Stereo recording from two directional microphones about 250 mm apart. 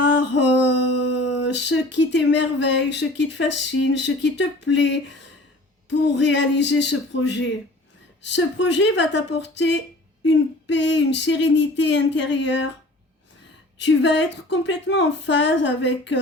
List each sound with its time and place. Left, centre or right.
0.0 s a sound: left
5.9 s a woman's voice: left
13.8 s a woman's voice: left